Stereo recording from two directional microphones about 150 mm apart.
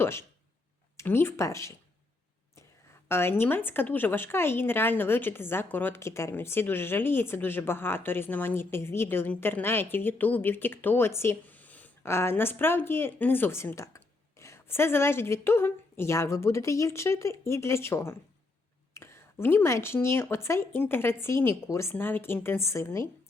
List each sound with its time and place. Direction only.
0.0 s speech: 15° left (ahead or behind)
3.1 s speech: 15° left (ahead or behind)